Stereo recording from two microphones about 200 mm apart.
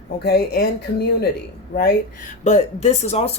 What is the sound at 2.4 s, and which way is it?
Speech, 35° left (ahead or behind).